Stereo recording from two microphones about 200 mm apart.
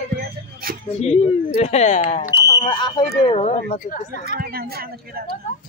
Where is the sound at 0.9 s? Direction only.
30° left (ahead or behind).